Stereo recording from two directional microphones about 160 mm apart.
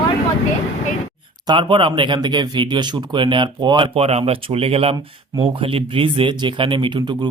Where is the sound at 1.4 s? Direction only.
30° right (ahead or behind).